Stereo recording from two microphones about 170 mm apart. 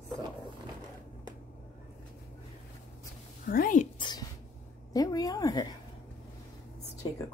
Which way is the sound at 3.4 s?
55° left (ahead or behind).